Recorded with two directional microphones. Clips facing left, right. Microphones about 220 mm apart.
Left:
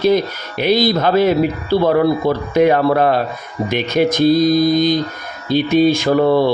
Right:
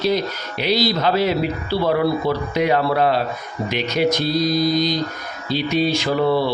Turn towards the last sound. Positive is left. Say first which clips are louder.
# left 5 dB
turn(degrees=50)  # may be behind; listen again after turning